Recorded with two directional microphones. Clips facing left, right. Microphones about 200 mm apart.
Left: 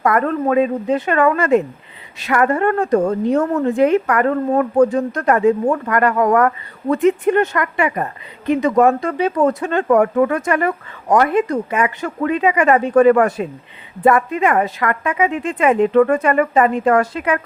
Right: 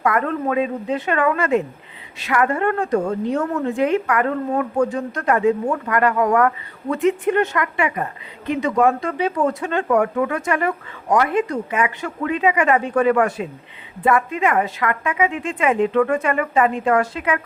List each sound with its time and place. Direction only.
0.0 s a woman's voice: 45° left (ahead or behind)
11.7 s a woman's voice: 40° left (ahead or behind)